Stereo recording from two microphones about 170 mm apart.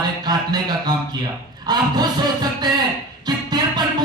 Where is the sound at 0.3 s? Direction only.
25° right (ahead or behind).